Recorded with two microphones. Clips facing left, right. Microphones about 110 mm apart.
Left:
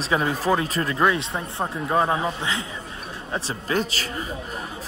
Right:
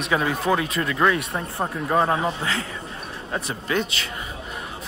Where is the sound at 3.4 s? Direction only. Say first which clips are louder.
Even; 30° left (ahead or behind).